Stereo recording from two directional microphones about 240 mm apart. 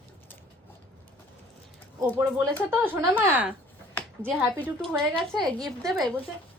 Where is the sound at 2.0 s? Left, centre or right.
Centre.